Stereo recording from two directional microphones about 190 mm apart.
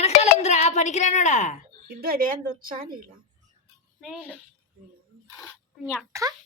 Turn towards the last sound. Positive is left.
turn(degrees=-15)  # may be behind; listen again after turning